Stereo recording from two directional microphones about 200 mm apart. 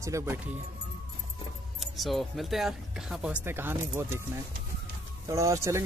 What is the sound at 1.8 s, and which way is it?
Speech, centre (ahead or behind).